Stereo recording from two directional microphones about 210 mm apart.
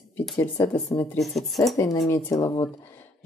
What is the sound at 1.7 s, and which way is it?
Speech, 15° left (ahead or behind).